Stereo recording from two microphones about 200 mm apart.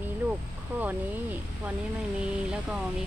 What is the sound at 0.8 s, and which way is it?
Speech, 10° right (ahead or behind).